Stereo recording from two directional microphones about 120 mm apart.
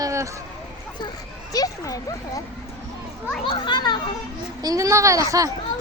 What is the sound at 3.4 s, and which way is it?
Speech, 40° left (ahead or behind).